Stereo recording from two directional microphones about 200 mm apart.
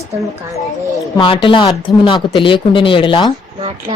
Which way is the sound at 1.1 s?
25° left (ahead or behind).